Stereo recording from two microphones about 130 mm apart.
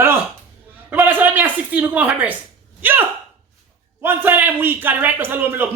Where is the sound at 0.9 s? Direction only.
15° right (ahead or behind).